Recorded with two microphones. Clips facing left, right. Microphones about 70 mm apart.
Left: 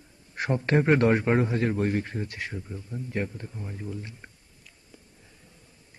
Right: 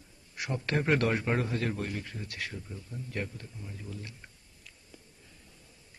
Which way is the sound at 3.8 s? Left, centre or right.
Left.